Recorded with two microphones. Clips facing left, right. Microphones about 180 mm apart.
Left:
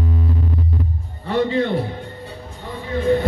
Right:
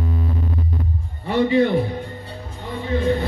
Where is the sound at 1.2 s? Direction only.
15° right (ahead or behind).